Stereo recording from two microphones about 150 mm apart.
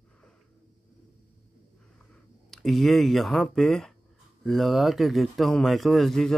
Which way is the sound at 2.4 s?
Centre (ahead or behind).